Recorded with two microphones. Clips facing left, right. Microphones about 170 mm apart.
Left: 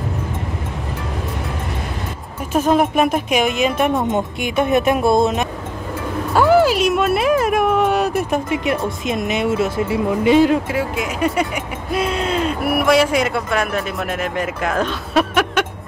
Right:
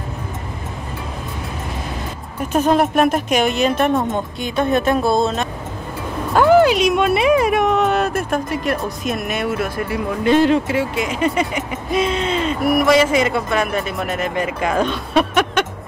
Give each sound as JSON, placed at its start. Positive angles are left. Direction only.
{"t": 2.5, "sound": "speech", "side_deg": 5}
{"t": 4.6, "sound": "speech", "side_deg": 20}
{"t": 6.3, "sound": "a sound", "side_deg": 5}
{"t": 8.6, "sound": "speech", "side_deg": 20}
{"t": 10.2, "sound": "speech", "side_deg": 5}